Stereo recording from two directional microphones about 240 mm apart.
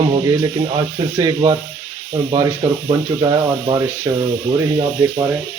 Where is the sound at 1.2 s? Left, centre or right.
Centre.